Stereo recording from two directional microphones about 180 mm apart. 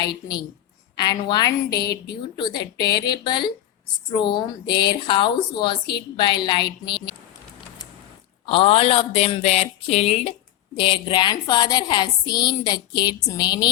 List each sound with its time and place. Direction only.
0.0 s a woman's voice: 25° left (ahead or behind)
8.4 s a woman's voice: 30° left (ahead or behind)